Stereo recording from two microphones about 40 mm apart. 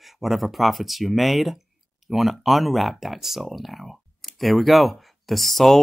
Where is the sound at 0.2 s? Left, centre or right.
Centre.